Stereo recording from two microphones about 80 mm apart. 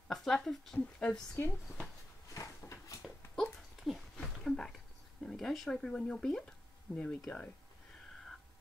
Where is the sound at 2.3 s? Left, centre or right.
Left.